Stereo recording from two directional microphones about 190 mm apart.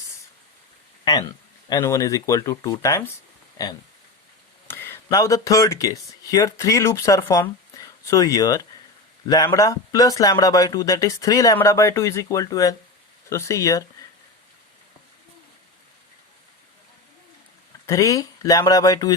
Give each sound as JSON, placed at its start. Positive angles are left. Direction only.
{"t": 1.7, "sound": "speech", "side_deg": 15}
{"t": 17.8, "sound": "speech", "side_deg": 15}